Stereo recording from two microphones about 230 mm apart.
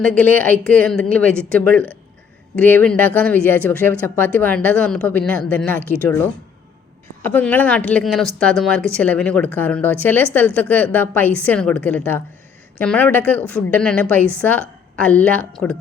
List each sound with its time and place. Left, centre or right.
0.0 s a woman's voice: centre
7.2 s a woman's voice: centre